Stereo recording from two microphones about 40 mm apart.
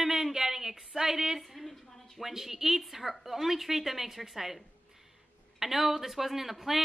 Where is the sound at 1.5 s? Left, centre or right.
Centre.